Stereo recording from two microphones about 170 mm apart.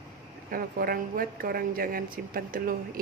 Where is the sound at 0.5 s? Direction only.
60° right (ahead or behind).